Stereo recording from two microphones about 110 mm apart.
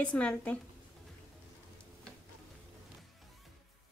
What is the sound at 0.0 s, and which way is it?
Speech, 10° left (ahead or behind).